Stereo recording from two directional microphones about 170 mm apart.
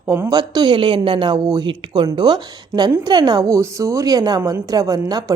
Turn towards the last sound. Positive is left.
turn(degrees=-20)  # may be behind; listen again after turning